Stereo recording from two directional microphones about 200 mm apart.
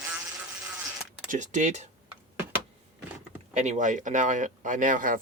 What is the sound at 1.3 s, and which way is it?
Speech, 40° right (ahead or behind).